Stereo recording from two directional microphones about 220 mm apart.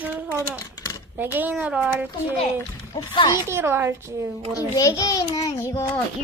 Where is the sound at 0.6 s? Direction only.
15° left (ahead or behind).